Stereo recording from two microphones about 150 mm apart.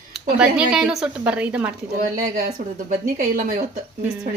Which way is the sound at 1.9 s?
65° right (ahead or behind).